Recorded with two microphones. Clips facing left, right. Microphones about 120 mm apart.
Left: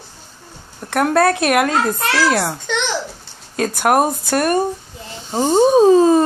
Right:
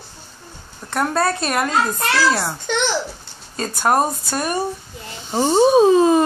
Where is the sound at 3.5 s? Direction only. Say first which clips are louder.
Left 3 dB; 70° left (ahead or behind).